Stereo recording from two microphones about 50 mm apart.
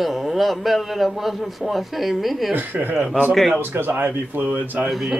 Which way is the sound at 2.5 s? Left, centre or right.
Right.